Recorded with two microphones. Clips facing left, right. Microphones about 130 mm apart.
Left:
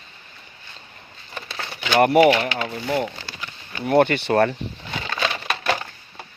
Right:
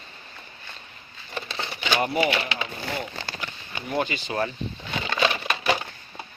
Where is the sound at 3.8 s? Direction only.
65° left (ahead or behind).